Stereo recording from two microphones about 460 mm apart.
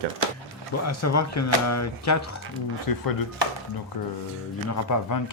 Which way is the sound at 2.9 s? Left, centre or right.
Left.